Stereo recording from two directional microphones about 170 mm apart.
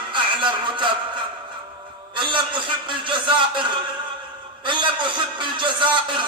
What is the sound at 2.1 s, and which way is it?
A man's voice, 30° right (ahead or behind).